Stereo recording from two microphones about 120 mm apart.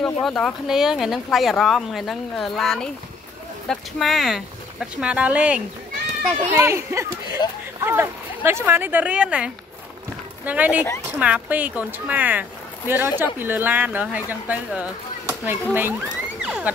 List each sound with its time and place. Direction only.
0.0 s speech: 5° left (ahead or behind); by 5.6 s 10° right (ahead or behind)
6.2 s a child's voice: 20° right (ahead or behind)
16.3 s a sound: 10° right (ahead or behind)